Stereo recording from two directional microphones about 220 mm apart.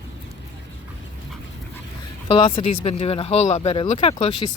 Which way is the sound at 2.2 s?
20° left (ahead or behind).